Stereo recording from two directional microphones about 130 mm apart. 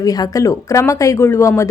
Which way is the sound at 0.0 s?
30° left (ahead or behind).